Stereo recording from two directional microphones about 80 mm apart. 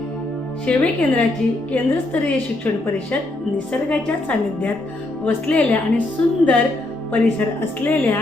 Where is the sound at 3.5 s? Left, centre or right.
Centre.